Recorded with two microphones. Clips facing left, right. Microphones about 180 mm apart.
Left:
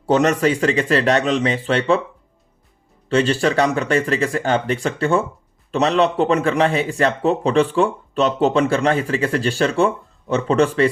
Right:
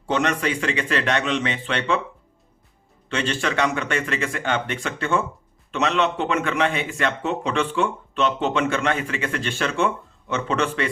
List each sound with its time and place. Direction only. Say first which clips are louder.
0.1 s speech: left 7 dB; 40° left (ahead or behind)
3.1 s speech: left 8 dB; 35° left (ahead or behind)